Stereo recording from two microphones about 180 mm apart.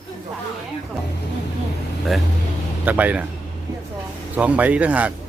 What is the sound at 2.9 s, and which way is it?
Speech, 10° right (ahead or behind).